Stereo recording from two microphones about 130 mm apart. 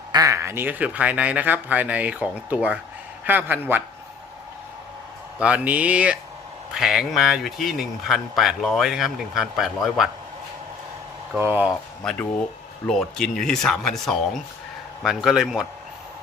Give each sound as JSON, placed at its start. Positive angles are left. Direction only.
{"t": 0.1, "sound": "speech", "side_deg": -30}
{"t": 5.4, "sound": "speech", "side_deg": -10}
{"t": 11.3, "sound": "speech", "side_deg": -15}
{"t": 12.0, "sound": "speech", "side_deg": 5}